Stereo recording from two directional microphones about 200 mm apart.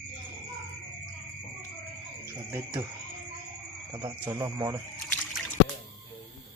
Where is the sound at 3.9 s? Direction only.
20° right (ahead or behind).